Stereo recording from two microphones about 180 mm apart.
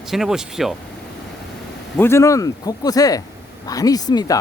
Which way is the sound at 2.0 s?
15° left (ahead or behind).